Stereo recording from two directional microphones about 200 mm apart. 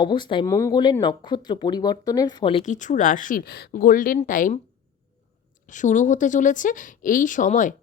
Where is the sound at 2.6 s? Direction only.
40° left (ahead or behind).